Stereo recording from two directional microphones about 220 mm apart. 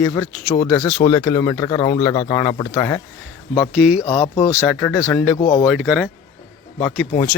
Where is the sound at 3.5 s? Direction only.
Centre (ahead or behind).